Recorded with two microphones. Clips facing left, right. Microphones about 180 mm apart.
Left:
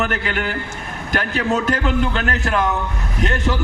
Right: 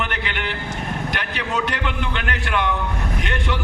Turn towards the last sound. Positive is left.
turn(degrees=40)  # may be behind; listen again after turning